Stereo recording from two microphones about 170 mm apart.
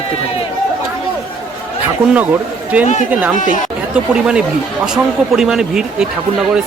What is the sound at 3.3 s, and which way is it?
Speech, 50° left (ahead or behind).